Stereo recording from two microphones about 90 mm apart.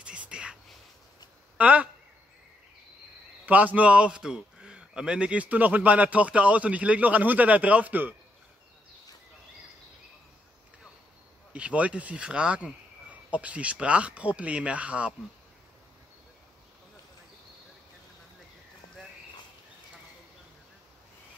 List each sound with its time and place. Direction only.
0.0 s a sound: 10° right (ahead or behind)
1.6 s a man's voice: 15° right (ahead or behind)
3.4 s a man's voice: 15° right (ahead or behind)
11.5 s a man's voice: 15° right (ahead or behind)